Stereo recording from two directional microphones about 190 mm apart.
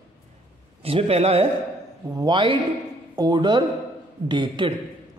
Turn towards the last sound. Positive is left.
turn(degrees=-25)  # may be behind; listen again after turning